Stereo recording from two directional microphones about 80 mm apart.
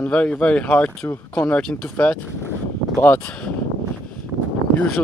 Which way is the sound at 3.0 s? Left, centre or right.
Left.